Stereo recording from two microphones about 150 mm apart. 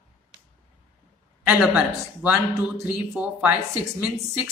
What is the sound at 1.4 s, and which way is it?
A woman's voice, 10° right (ahead or behind).